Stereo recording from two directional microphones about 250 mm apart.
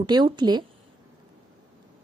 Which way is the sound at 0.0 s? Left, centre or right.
Centre.